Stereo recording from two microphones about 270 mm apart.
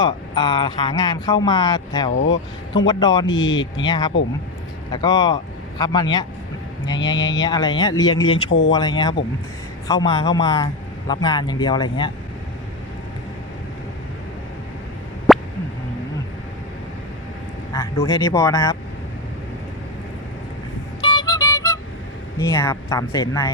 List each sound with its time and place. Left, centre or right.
0.0 s speech: centre
2.1 s speech: left
2.7 s speech: centre
3.2 s speech: left
3.8 s speech: centre
7.2 s speech: left
7.4 s speech: centre
8.4 s speech: left
8.7 s speech: centre
15.3 s a sound: centre
17.7 s speech: centre
21.0 s music: centre
22.4 s speech: centre